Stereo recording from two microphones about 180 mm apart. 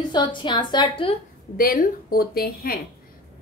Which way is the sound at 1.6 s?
50° left (ahead or behind).